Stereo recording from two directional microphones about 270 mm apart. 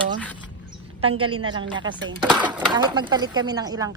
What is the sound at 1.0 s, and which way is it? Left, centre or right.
A woman's voice, centre.